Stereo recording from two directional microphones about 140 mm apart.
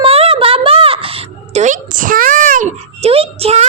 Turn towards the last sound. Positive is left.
turn(degrees=-45)  # may be behind; listen again after turning